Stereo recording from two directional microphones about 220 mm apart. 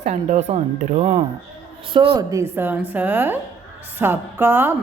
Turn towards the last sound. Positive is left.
turn(degrees=-10)  # may be behind; listen again after turning